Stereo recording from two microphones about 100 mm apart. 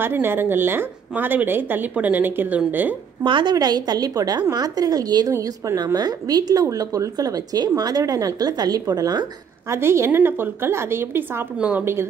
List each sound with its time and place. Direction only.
0.0 s a woman's voice: 20° right (ahead or behind)
3.3 s a woman's voice: 55° right (ahead or behind)
3.5 s speech: 40° right (ahead or behind)
9.7 s a woman's voice: 25° right (ahead or behind)
11.5 s a woman's voice: 10° right (ahead or behind)
11.8 s a woman's voice: 25° right (ahead or behind)